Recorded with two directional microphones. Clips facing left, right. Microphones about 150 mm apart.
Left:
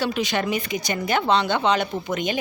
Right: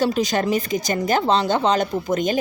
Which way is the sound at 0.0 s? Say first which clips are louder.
Right 4 dB; 40° right (ahead or behind).